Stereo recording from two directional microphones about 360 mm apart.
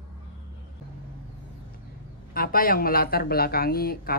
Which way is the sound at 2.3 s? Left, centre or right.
Left.